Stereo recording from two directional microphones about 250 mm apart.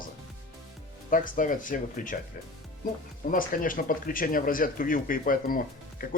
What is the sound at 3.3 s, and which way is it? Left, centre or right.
Speech, left.